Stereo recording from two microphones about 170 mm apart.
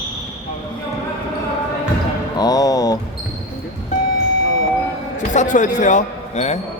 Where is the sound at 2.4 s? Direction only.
20° left (ahead or behind).